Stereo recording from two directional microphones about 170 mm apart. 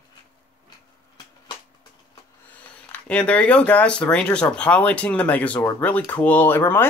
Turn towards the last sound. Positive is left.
turn(degrees=15)  # may be behind; listen again after turning